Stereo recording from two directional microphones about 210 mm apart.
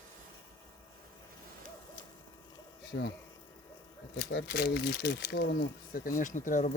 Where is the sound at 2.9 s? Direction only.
55° left (ahead or behind).